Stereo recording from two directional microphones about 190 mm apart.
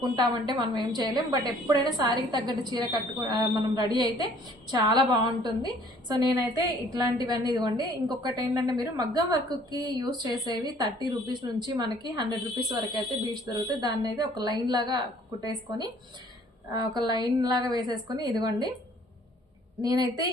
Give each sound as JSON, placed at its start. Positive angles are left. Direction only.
{"t": 0.0, "sound": "a woman's voice", "side_deg": -20}
{"t": 19.8, "sound": "a woman's voice", "side_deg": -20}